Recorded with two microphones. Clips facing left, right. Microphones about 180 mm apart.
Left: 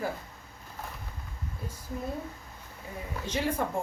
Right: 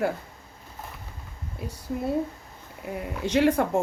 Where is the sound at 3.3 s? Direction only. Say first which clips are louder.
Right 10 dB; 75° right (ahead or behind).